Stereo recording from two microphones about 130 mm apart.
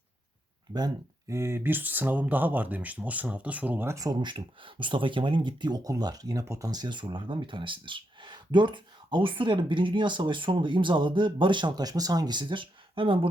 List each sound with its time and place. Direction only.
1.3 s speech: 20° right (ahead or behind); by 13.1 s 40° right (ahead or behind)